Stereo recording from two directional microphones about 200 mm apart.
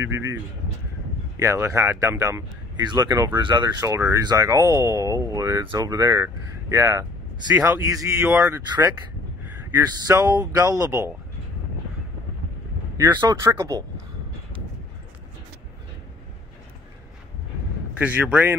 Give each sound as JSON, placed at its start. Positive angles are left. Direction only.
{"t": 0.0, "sound": "speech", "side_deg": -15}
{"t": 12.9, "sound": "speech", "side_deg": -20}
{"t": 17.9, "sound": "speech", "side_deg": -10}